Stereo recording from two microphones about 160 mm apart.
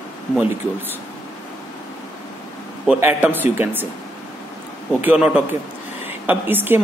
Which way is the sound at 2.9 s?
10° right (ahead or behind).